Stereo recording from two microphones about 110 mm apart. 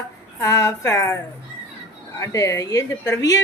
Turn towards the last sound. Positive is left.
turn(degrees=30)  # may be behind; listen again after turning